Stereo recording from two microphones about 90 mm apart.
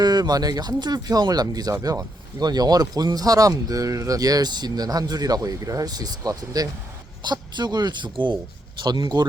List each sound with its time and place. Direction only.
0.0 s speech: 50° right (ahead or behind)
7.2 s speech: 55° right (ahead or behind)